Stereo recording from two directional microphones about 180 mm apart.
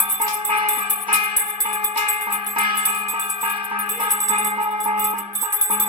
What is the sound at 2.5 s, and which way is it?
Music, 30° right (ahead or behind).